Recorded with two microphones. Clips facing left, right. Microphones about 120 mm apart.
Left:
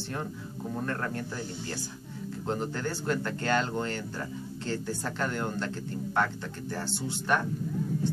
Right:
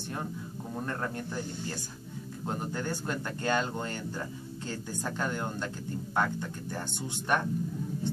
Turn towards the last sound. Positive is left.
turn(degrees=-15)  # may be behind; listen again after turning